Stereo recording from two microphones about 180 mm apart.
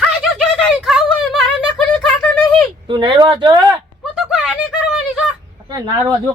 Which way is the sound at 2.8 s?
25° right (ahead or behind).